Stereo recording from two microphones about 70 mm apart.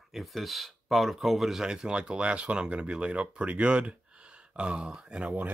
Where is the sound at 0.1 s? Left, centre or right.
Centre.